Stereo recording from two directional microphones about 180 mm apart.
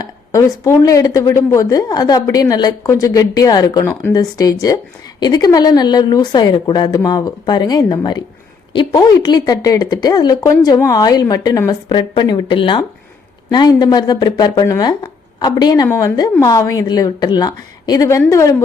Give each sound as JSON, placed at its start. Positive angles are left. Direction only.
{"t": 0.3, "sound": "a woman's voice", "side_deg": 15}